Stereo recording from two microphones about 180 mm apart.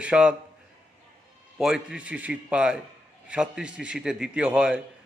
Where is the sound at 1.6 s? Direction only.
5° right (ahead or behind).